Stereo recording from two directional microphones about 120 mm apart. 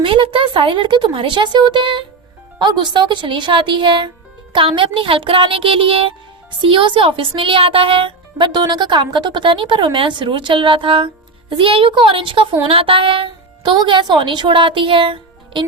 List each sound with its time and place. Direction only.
0.0 s a woman's voice: 45° right (ahead or behind)